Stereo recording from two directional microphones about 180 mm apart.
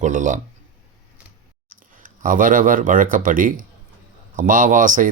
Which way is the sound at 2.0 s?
50° right (ahead or behind).